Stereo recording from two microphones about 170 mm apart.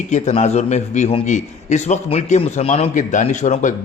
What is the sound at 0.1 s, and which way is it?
A man's voice, 40° left (ahead or behind).